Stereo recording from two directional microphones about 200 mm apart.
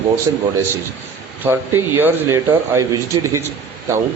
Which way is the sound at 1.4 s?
10° right (ahead or behind).